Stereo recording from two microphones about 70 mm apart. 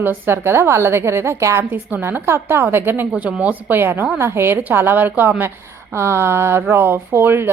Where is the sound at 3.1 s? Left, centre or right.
Centre.